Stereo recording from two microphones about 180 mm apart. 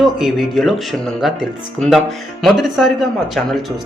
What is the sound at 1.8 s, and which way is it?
Speech, centre (ahead or behind).